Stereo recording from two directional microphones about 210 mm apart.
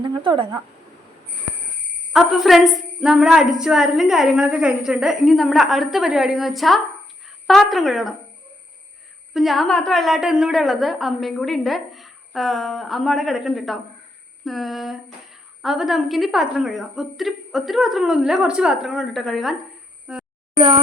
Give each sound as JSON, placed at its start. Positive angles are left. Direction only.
{"t": 0.0, "sound": "speech", "side_deg": -20}
{"t": 2.1, "sound": "a woman's voice", "side_deg": 0}
{"t": 9.3, "sound": "a woman's voice", "side_deg": 0}
{"t": 20.1, "sound": "a sound", "side_deg": -5}